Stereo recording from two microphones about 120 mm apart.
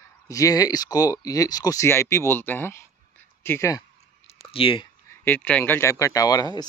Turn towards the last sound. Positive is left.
turn(degrees=30)  # may be behind; listen again after turning